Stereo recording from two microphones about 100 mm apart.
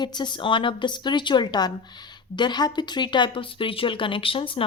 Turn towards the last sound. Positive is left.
turn(degrees=65)  # may be behind; listen again after turning